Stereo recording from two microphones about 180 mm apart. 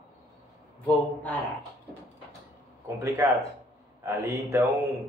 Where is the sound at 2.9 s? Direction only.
15° right (ahead or behind).